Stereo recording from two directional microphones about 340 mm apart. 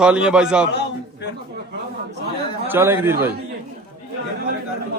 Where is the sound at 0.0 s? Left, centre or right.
Centre.